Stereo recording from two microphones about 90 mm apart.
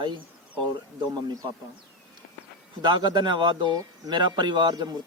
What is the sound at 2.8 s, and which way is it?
Speech, 55° right (ahead or behind).